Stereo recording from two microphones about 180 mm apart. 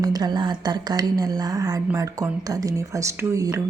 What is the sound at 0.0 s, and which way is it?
A woman's voice, 20° right (ahead or behind).